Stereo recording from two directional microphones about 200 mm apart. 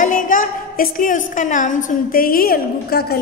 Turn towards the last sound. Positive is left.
turn(degrees=50)  # may be behind; listen again after turning